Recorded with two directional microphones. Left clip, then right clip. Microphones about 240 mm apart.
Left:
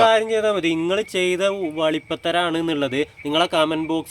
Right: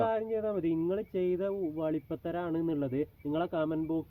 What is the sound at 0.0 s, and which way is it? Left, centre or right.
Speech, centre.